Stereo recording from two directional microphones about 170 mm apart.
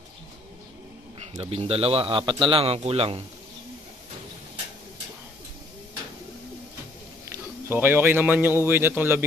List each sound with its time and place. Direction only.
1.4 s a man's voice: 35° right (ahead or behind)
7.2 s speech: 15° right (ahead or behind)